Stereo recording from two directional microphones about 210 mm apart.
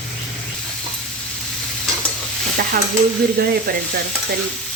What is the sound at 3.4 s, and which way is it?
Speech, 50° right (ahead or behind).